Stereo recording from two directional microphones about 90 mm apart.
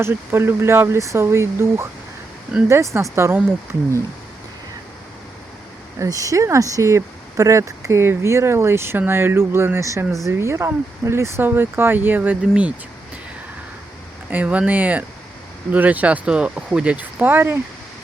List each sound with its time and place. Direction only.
0.0 s speech: 25° right (ahead or behind)
6.0 s speech: 40° right (ahead or behind); by 12.7 s 15° right (ahead or behind)
14.3 s speech: 15° right (ahead or behind)